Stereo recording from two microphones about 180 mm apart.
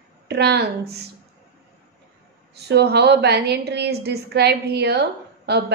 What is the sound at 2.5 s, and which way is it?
A woman's voice, 65° right (ahead or behind).